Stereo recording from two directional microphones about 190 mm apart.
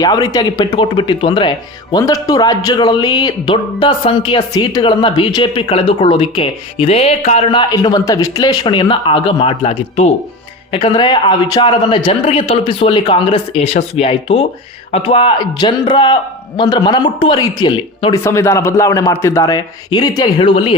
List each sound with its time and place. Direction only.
0.0 s speech: 20° left (ahead or behind)
7.7 s speech: 20° left (ahead or behind)
18.2 s a man's voice: 15° left (ahead or behind)